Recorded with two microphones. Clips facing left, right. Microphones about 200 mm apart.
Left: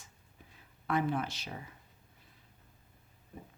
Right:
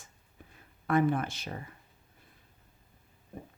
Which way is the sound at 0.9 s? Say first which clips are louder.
Right 5 dB; 50° right (ahead or behind).